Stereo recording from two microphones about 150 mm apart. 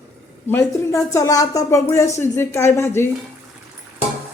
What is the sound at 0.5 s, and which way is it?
Speech, 20° left (ahead or behind).